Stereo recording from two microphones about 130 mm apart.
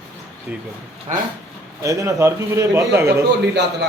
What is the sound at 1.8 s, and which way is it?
A man's voice, 20° right (ahead or behind).